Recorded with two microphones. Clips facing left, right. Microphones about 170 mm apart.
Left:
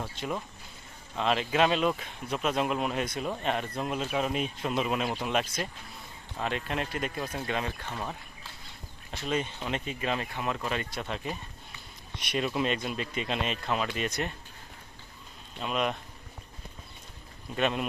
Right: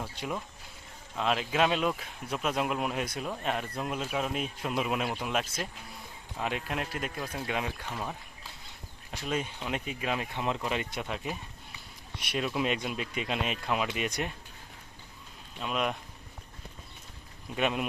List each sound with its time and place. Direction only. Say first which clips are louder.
0.0 s speech: left 1 dB; 5° right (ahead or behind)
9.1 s speech: left 2 dB; 10° right (ahead or behind)
10.3 s speech: even; 20° right (ahead or behind)
11.0 s speech: left 1 dB; 5° right (ahead or behind)
15.5 s speech: left 1 dB; centre (ahead or behind)
17.6 s speech: left 1 dB; 5° right (ahead or behind)